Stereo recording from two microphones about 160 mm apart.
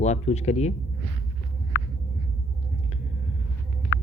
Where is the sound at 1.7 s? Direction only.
90° left.